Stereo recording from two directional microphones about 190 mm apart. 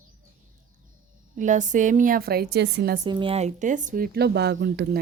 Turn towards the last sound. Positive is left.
turn(degrees=-60)  # may be behind; listen again after turning